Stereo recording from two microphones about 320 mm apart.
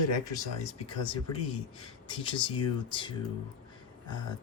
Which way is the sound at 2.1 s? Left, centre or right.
Centre.